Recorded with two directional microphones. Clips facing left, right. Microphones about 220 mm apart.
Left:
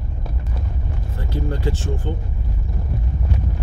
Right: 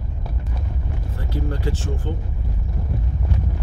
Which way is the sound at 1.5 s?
25° left (ahead or behind).